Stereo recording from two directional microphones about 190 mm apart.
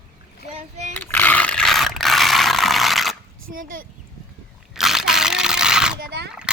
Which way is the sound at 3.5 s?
45° right (ahead or behind).